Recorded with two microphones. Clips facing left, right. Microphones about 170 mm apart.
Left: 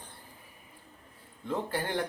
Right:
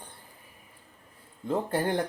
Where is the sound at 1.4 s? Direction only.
35° right (ahead or behind).